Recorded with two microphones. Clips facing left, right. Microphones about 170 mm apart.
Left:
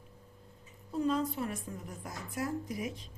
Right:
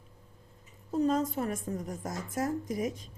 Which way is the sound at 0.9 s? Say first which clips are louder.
Right 3 dB; 40° right (ahead or behind).